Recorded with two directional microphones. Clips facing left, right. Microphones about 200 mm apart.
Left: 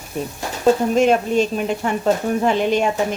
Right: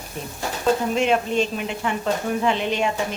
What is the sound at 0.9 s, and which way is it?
Speech, 45° left (ahead or behind).